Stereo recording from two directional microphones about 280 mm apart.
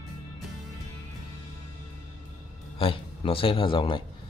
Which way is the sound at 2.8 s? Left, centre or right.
Centre.